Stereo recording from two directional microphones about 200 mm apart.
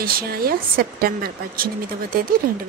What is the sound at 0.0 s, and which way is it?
Speech, 50° right (ahead or behind).